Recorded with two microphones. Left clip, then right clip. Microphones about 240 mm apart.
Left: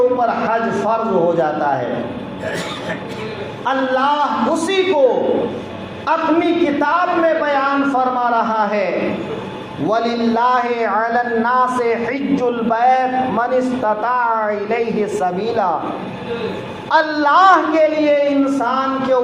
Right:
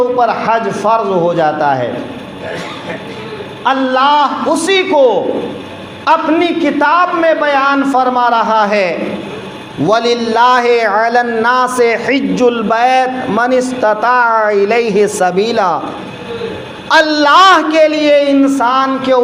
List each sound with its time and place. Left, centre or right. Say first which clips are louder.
0.2 s a man's voice: right 5 dB; right
3.6 s a man's voice: right 6 dB; right
16.9 s a man's voice: right 6 dB; right